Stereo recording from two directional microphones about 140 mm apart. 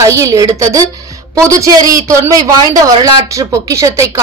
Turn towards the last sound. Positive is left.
turn(degrees=-20)  # may be behind; listen again after turning